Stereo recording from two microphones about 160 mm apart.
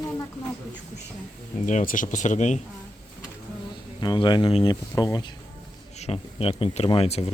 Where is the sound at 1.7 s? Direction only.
55° left (ahead or behind).